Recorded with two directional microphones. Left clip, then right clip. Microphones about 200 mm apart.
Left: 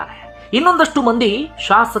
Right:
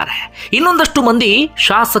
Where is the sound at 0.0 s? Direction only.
20° right (ahead or behind).